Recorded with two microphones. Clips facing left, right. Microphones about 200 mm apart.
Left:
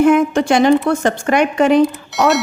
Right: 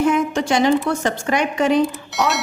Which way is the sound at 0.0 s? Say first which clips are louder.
Left 6 dB; 55° left (ahead or behind).